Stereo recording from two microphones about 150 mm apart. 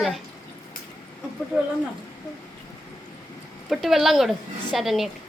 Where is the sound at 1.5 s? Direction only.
5° right (ahead or behind).